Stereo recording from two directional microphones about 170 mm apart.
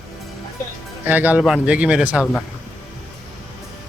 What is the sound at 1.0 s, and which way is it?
Speech, 10° right (ahead or behind).